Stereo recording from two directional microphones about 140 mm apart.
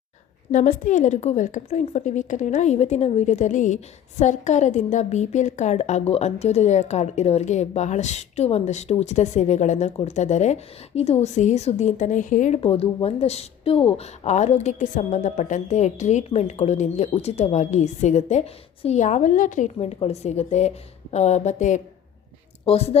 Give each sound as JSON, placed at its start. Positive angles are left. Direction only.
{"t": 0.5, "sound": "a woman's voice", "side_deg": 65}
{"t": 12.5, "sound": "a woman's voice", "side_deg": 45}
{"t": 22.6, "sound": "speech", "side_deg": 45}